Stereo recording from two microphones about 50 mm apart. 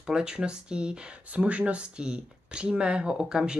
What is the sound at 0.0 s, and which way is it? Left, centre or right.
Speech, centre.